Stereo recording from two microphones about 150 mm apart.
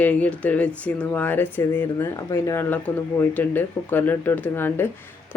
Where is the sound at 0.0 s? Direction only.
10° left (ahead or behind).